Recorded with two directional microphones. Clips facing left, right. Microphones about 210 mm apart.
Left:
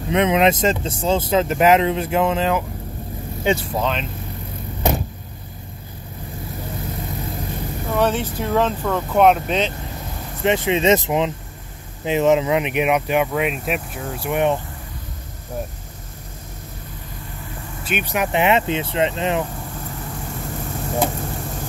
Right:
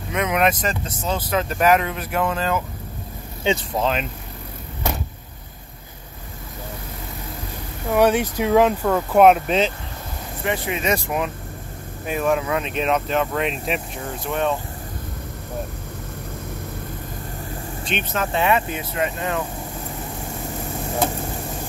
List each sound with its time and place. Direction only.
0.1 s speech: 25° left (ahead or behind)
3.7 s speech: 5° right (ahead or behind)
7.9 s speech: 10° right (ahead or behind)
10.4 s speech: 20° left (ahead or behind)
17.8 s speech: 10° left (ahead or behind)